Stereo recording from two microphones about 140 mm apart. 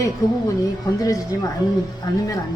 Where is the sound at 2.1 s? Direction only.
30° left (ahead or behind).